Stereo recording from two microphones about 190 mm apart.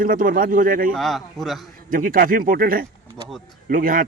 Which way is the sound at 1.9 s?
45° right (ahead or behind).